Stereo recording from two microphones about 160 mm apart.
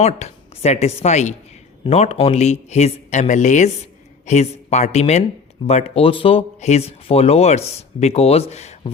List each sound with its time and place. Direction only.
0.0 s speech: 40° left (ahead or behind)